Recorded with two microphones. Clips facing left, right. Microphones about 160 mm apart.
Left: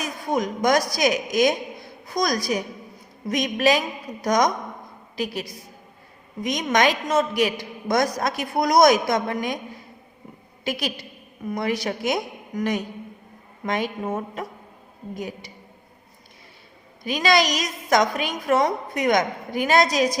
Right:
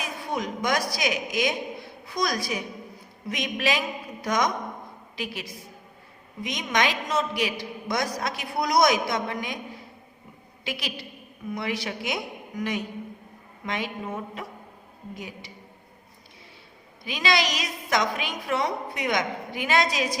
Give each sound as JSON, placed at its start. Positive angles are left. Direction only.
{"t": 0.0, "sound": "a man's voice", "side_deg": 45}
{"t": 10.6, "sound": "a woman's voice", "side_deg": 45}
{"t": 17.0, "sound": "a woman's voice", "side_deg": 45}